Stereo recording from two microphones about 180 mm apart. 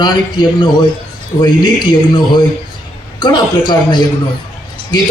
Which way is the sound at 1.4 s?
25° left (ahead or behind).